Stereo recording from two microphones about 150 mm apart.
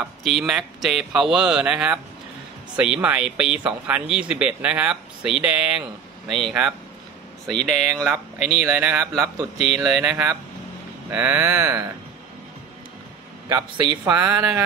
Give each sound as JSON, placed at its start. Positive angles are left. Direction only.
{"t": 0.0, "sound": "speech", "side_deg": 0}
{"t": 8.0, "sound": "speech", "side_deg": -10}
{"t": 13.5, "sound": "a man's voice", "side_deg": -25}
{"t": 14.0, "sound": "speech", "side_deg": -10}